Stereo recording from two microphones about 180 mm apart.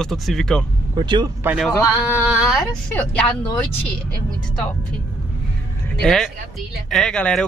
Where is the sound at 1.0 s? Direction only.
25° right (ahead or behind).